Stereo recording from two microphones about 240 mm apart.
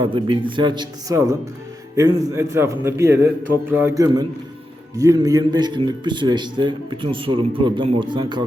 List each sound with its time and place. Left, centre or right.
0.0 s a man's voice: centre